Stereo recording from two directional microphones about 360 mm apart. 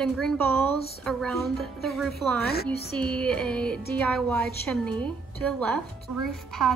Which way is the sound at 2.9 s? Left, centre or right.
Centre.